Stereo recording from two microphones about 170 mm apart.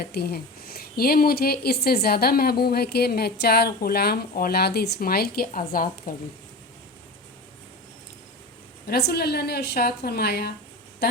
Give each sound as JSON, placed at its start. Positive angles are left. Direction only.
{"t": 0.0, "sound": "speech", "side_deg": 70}
{"t": 8.9, "sound": "a woman's voice", "side_deg": 70}